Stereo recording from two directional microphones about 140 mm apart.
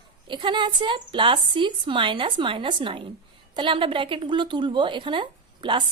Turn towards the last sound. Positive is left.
turn(degrees=-35)  # may be behind; listen again after turning